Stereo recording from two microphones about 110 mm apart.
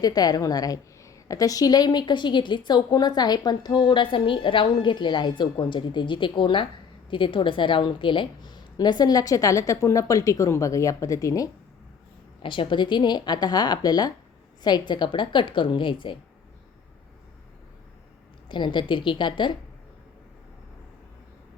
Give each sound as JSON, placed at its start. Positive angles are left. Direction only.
{"t": 0.0, "sound": "a woman's voice", "side_deg": 35}
{"t": 12.4, "sound": "a woman's voice", "side_deg": 50}
{"t": 18.4, "sound": "a woman's voice", "side_deg": 45}